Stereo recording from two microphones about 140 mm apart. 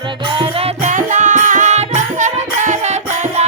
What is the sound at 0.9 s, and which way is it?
Music, 65° right (ahead or behind).